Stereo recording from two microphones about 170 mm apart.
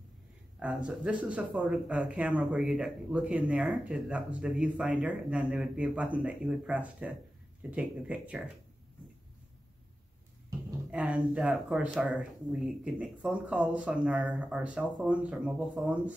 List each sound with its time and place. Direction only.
0.6 s speech: 5° right (ahead or behind)
10.9 s speech: 5° right (ahead or behind)